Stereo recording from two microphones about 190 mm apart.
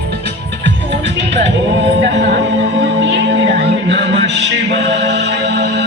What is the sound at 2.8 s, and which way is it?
Music, 65° right (ahead or behind).